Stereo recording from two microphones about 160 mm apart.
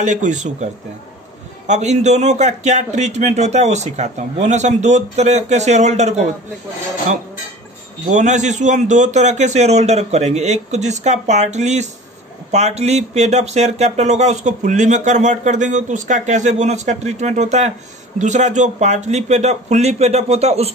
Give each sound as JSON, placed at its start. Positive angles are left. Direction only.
{"t": 0.0, "sound": "speech", "side_deg": -50}
{"t": 1.7, "sound": "speech", "side_deg": -45}
{"t": 8.1, "sound": "speech", "side_deg": -50}